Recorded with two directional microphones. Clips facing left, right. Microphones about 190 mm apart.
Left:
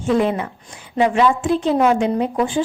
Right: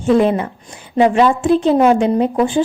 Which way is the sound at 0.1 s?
30° right (ahead or behind).